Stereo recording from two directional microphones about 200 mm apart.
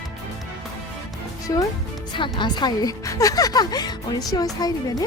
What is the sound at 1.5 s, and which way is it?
A woman's voice, 20° left (ahead or behind).